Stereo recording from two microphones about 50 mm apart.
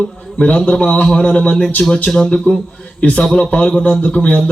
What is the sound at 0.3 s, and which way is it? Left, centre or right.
A man's voice, left.